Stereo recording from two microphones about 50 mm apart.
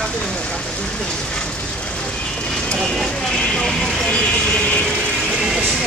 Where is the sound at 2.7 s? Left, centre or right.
Centre.